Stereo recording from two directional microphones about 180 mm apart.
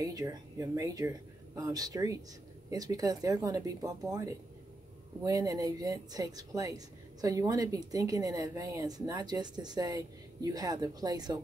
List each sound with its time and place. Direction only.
0.0 s a woman's voice: 20° right (ahead or behind)